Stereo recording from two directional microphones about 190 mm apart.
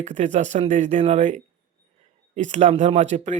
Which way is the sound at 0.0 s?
40° right (ahead or behind).